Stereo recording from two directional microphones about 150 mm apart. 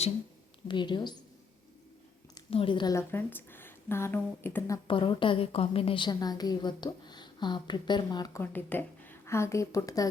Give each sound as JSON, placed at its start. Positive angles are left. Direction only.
{"t": 0.7, "sound": "a woman's voice", "side_deg": 30}
{"t": 2.5, "sound": "a woman's voice", "side_deg": 35}
{"t": 2.9, "sound": "a woman's voice", "side_deg": 15}
{"t": 4.9, "sound": "a woman's voice", "side_deg": 35}
{"t": 8.4, "sound": "a woman's voice", "side_deg": 10}